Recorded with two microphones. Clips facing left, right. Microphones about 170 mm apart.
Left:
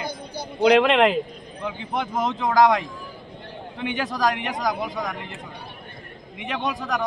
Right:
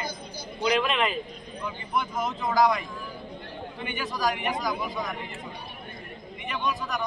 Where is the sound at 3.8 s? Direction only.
90° left.